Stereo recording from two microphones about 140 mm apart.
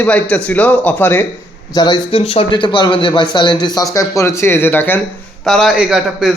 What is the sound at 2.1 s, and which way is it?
A man's voice, 40° left (ahead or behind).